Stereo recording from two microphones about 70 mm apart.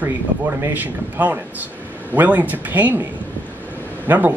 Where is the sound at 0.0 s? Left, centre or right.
Right.